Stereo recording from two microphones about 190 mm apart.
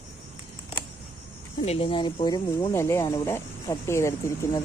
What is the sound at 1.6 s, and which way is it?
Speech, 30° left (ahead or behind).